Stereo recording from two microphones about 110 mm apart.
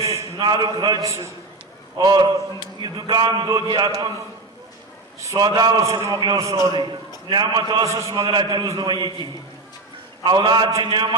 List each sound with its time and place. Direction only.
0.0 s a sound: 25° right (ahead or behind)
0.3 s a man's voice: 40° right (ahead or behind)
5.2 s a man's voice: 30° right (ahead or behind)
5.5 s a man's voice: 40° right (ahead or behind)
7.9 s a man's voice: 30° right (ahead or behind)
8.1 s a man's voice: 45° right (ahead or behind)
8.4 s a man's voice: 30° right (ahead or behind)
10.2 s a man's voice: 45° right (ahead or behind)